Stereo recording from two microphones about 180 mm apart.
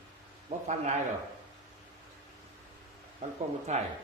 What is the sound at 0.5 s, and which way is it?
Speech, 40° right (ahead or behind).